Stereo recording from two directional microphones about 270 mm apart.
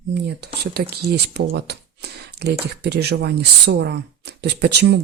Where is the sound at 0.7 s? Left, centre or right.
Right.